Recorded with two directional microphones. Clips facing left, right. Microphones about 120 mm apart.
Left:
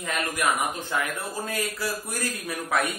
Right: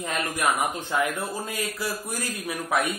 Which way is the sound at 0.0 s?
25° right (ahead or behind).